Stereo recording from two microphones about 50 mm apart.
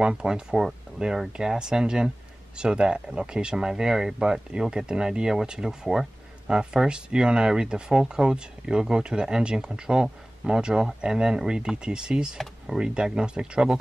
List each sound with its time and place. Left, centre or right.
0.0 s speech: centre